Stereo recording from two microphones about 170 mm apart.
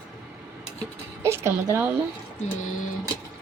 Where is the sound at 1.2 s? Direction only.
15° right (ahead or behind).